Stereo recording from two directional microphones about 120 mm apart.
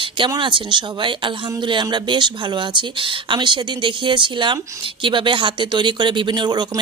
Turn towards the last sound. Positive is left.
turn(degrees=-35)  # may be behind; listen again after turning